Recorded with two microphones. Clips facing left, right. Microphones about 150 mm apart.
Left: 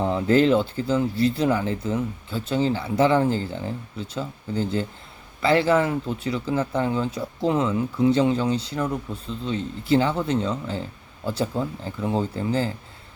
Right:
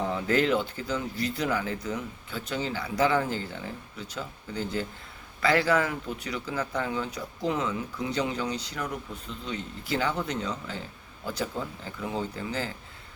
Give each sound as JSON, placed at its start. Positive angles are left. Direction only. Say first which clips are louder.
{"t": 0.0, "sound": "speech", "louder": "left 7 dB", "side_deg": 30}
{"t": 11.9, "sound": "speech", "louder": "left 6 dB", "side_deg": 35}